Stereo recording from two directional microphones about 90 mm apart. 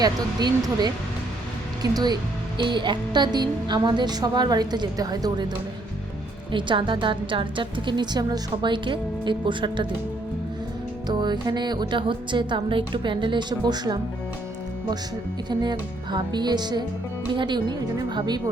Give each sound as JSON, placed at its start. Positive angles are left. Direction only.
{"t": 0.0, "sound": "speech", "side_deg": -50}
{"t": 2.6, "sound": "speech", "side_deg": -60}
{"t": 6.5, "sound": "a woman's voice", "side_deg": -65}
{"t": 11.1, "sound": "a woman's voice", "side_deg": -55}
{"t": 15.4, "sound": "speech", "side_deg": -55}
{"t": 17.2, "sound": "a woman's voice", "side_deg": -65}